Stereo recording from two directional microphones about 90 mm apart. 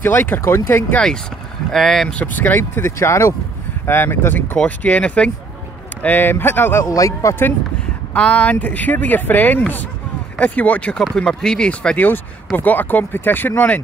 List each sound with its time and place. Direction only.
0.0 s speech: 20° left (ahead or behind)
1.7 s speech: 5° left (ahead or behind)
2.1 s speech: 20° left (ahead or behind)
6.8 s speech: 35° left (ahead or behind)
8.1 s speech: 15° left (ahead or behind)
12.5 s speech: 20° left (ahead or behind)